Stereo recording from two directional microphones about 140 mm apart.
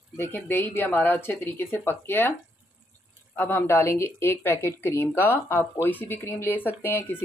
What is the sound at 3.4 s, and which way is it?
Speech, 15° left (ahead or behind).